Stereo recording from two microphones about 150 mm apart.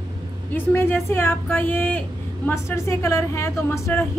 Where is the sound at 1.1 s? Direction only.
15° left (ahead or behind).